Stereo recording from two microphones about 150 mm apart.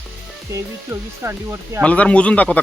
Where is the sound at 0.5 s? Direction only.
20° right (ahead or behind).